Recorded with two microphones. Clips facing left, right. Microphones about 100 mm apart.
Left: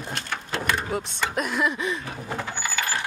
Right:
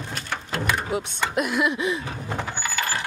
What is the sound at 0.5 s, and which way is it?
Speech, 5° right (ahead or behind).